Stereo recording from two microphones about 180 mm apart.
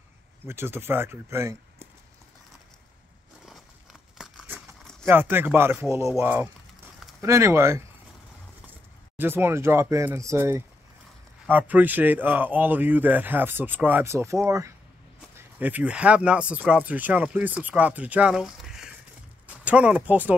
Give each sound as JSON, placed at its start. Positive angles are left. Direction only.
{"t": 0.5, "sound": "speech", "side_deg": -15}
{"t": 4.2, "sound": "a sound", "side_deg": 0}
{"t": 5.0, "sound": "speech", "side_deg": -10}
{"t": 9.1, "sound": "speech", "side_deg": -10}